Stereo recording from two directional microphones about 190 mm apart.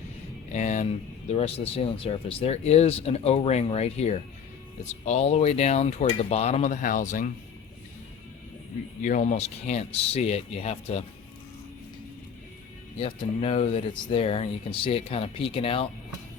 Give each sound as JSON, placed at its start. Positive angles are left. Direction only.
{"t": 0.5, "sound": "speech", "side_deg": 40}
{"t": 9.0, "sound": "speech", "side_deg": 40}
{"t": 13.0, "sound": "speech", "side_deg": 30}